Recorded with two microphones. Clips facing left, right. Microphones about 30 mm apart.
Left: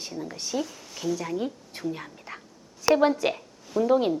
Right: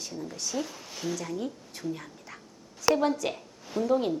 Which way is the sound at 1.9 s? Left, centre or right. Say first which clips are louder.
Left 2 dB; left.